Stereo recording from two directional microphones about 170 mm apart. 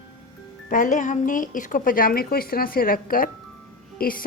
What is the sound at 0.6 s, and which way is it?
Speech, 50° left (ahead or behind).